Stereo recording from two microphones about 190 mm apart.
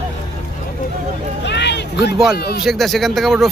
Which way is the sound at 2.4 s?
55° left (ahead or behind).